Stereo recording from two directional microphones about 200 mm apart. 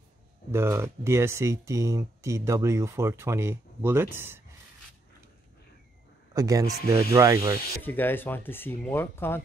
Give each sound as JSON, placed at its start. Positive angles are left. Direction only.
{"t": 0.5, "sound": "speech", "side_deg": -10}
{"t": 6.3, "sound": "speech", "side_deg": -15}
{"t": 7.8, "sound": "speech", "side_deg": 10}